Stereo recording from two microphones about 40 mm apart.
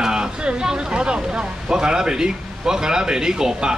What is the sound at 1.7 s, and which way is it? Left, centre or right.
Speech, centre.